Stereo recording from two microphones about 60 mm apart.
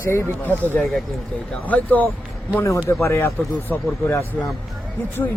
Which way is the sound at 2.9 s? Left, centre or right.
Left.